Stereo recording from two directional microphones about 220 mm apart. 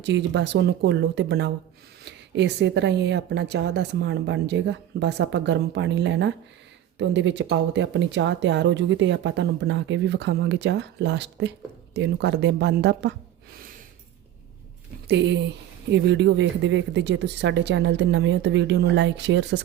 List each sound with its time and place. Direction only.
0.0 s a woman's voice: 50° right (ahead or behind)
15.0 s a woman's voice: 50° right (ahead or behind)